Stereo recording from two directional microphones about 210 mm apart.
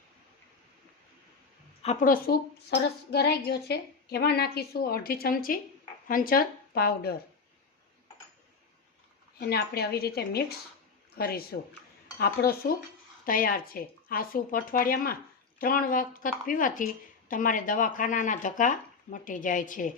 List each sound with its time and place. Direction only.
1.8 s a woman's voice: 35° left (ahead or behind)
9.4 s a woman's voice: 50° left (ahead or behind)